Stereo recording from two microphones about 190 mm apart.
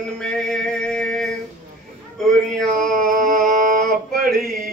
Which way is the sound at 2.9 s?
45° right (ahead or behind).